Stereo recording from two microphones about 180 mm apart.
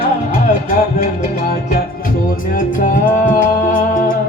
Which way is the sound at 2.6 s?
45° left (ahead or behind).